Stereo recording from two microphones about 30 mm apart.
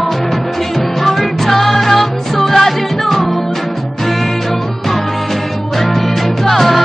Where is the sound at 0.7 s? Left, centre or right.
Centre.